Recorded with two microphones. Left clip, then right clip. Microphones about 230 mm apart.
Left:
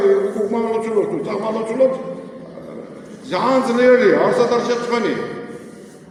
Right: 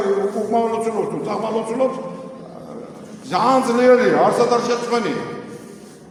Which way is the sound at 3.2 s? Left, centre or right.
Right.